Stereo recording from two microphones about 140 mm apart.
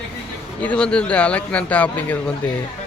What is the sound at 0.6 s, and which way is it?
Speech, 10° left (ahead or behind).